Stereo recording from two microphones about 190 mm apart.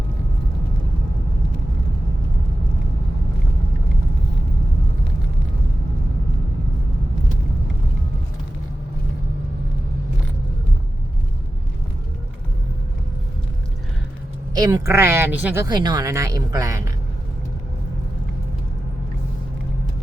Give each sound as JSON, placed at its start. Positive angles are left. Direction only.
{"t": 14.5, "sound": "speech", "side_deg": -20}
{"t": 15.6, "sound": "speech", "side_deg": -20}